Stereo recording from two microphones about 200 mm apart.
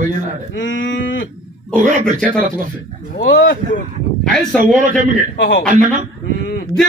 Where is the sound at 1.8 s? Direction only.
40° right (ahead or behind).